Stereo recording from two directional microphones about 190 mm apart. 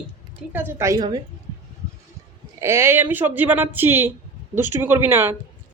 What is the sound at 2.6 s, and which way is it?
Speech, 15° right (ahead or behind).